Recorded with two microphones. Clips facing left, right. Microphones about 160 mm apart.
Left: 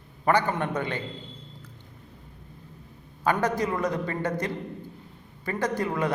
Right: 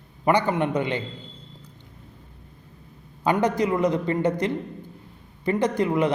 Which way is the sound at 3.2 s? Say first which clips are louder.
Right 3 dB; 20° right (ahead or behind).